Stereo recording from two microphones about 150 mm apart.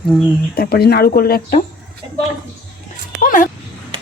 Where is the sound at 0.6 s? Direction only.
90° left.